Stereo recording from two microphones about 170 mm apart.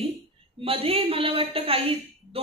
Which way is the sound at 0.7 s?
35° right (ahead or behind).